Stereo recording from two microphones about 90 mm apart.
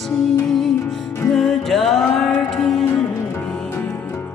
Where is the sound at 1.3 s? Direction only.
Centre (ahead or behind).